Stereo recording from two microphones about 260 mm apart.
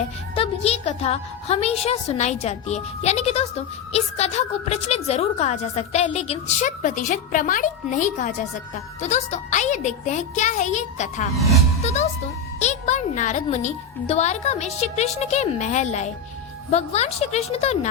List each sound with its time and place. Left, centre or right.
0.3 s a woman's voice: left
12.5 s a woman's voice: left